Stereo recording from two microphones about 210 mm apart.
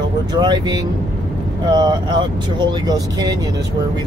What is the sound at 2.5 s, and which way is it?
Speech, 20° right (ahead or behind).